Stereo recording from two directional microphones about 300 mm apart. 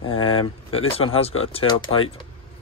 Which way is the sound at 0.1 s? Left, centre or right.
Centre.